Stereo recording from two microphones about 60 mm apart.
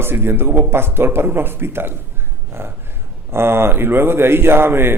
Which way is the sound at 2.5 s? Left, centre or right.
Right.